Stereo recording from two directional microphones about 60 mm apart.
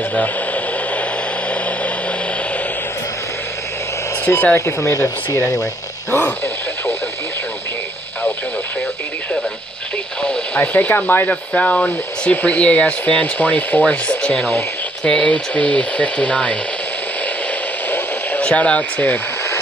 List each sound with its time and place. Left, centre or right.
4.6 s speech: left
6.1 s radio: left
10.2 s speech: centre
10.6 s speech: left
11.2 s rub: left
17.8 s a sound: left